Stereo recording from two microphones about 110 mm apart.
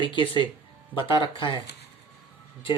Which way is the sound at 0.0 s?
45° left (ahead or behind).